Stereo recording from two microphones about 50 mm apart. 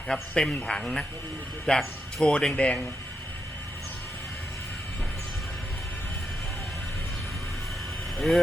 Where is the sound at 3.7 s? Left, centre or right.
Left.